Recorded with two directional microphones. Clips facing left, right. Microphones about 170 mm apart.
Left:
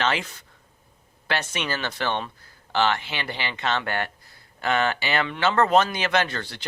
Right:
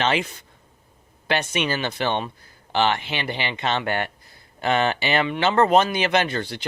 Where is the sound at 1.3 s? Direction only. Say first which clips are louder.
Right 4 dB; 15° right (ahead or behind).